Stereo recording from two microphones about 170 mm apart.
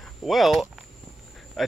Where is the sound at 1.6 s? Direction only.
Centre (ahead or behind).